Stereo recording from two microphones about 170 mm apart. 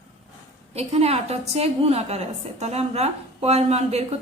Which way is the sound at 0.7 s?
35° right (ahead or behind).